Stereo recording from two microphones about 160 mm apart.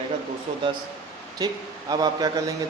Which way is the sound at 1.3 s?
25° right (ahead or behind).